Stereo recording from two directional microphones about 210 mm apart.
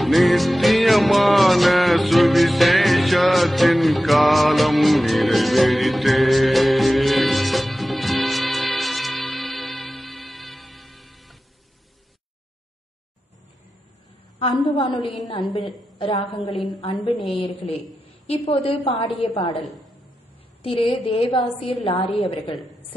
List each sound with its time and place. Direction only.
0.0 s music: centre (ahead or behind)
14.4 s a sound: 25° left (ahead or behind)
16.0 s a woman's voice: 25° left (ahead or behind)
17.2 s a woman's voice: centre (ahead or behind)
18.2 s a woman's voice: 30° left (ahead or behind)
20.6 s a woman's voice: 25° left (ahead or behind)